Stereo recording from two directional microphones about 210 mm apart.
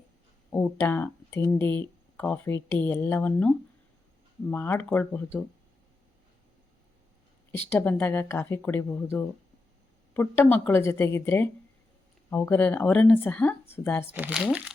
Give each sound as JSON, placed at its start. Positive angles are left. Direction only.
{"t": 0.5, "sound": "speech", "side_deg": 5}
{"t": 4.5, "sound": "speech", "side_deg": 10}
{"t": 7.7, "sound": "speech", "side_deg": 5}
{"t": 14.1, "sound": "speech", "side_deg": -5}